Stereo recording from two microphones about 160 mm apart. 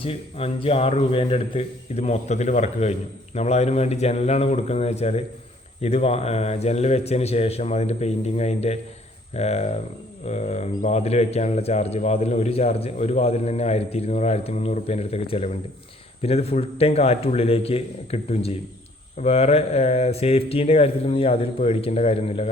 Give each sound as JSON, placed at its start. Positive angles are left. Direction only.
{"t": 0.0, "sound": "speech", "side_deg": 35}